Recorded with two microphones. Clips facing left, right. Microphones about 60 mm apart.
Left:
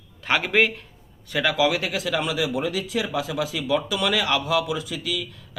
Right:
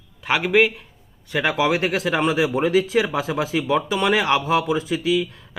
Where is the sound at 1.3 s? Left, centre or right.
Right.